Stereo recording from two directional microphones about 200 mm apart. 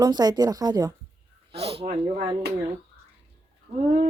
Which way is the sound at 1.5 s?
30° right (ahead or behind).